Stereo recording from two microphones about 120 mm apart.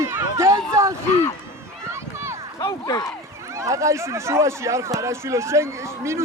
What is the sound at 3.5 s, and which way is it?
Speech, 25° right (ahead or behind).